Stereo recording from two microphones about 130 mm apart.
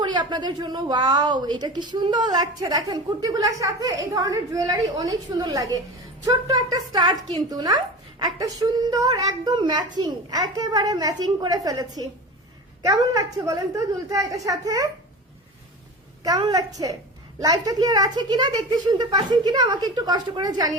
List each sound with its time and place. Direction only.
0.0 s a woman's voice: 35° right (ahead or behind)
16.2 s a woman's voice: 30° right (ahead or behind)